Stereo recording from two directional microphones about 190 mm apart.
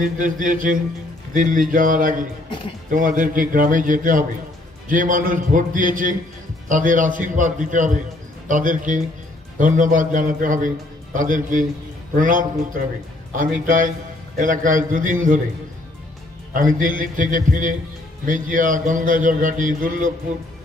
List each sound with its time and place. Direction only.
0.0 s a man's voice: 45° right (ahead or behind)
16.5 s a man's voice: 45° right (ahead or behind)